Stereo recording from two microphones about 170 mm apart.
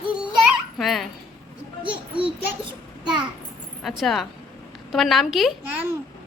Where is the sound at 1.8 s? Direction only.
30° right (ahead or behind).